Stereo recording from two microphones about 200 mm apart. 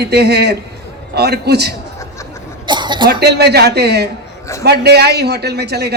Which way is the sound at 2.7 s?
20° right (ahead or behind).